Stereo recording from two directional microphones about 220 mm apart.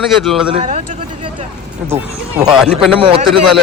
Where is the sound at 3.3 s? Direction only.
Centre (ahead or behind).